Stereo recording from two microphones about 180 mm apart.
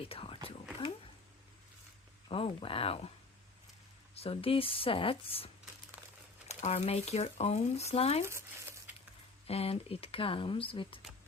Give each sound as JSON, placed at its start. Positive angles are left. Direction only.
{"t": 0.0, "sound": "whispering", "side_deg": 30}
{"t": 2.3, "sound": "speech", "side_deg": 30}
{"t": 4.1, "sound": "speech", "side_deg": 35}
{"t": 6.5, "sound": "speech", "side_deg": 35}
{"t": 8.2, "sound": "speech", "side_deg": -15}
{"t": 9.5, "sound": "speech", "side_deg": 35}